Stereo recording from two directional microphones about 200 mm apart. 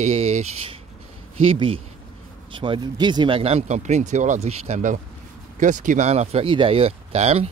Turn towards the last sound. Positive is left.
turn(degrees=-30)  # may be behind; listen again after turning